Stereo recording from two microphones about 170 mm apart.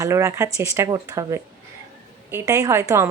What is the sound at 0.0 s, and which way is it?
A woman's voice, 15° right (ahead or behind).